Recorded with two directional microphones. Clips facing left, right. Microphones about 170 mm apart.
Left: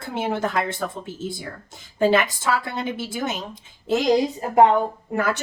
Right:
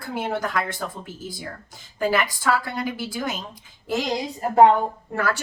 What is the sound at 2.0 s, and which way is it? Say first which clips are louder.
A woman's voice: left 4 dB; 25° left (ahead or behind).